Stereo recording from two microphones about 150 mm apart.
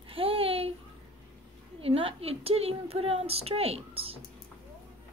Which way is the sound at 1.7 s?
40° right (ahead or behind).